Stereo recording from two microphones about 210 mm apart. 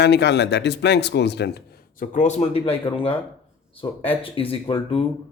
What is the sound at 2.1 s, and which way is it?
Speech, 35° left (ahead or behind).